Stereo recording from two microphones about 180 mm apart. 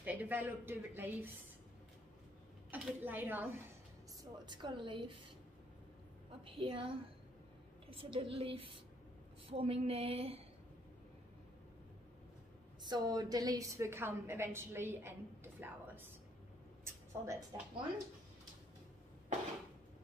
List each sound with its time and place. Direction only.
0.0 s a woman's voice: 10° right (ahead or behind)
2.7 s a woman's voice: 10° right (ahead or behind)
4.2 s a woman's voice: 25° right (ahead or behind)
6.4 s a woman's voice: 30° right (ahead or behind)
8.0 s a sound: 30° right (ahead or behind)
12.8 s a woman's voice: 25° right (ahead or behind)
16.8 s a sound: 15° right (ahead or behind)